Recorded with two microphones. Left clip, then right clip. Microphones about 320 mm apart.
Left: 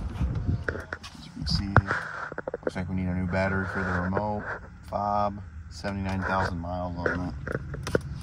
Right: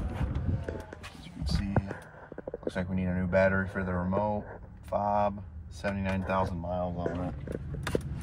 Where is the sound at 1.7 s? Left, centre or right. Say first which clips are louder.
Left 13 dB; right.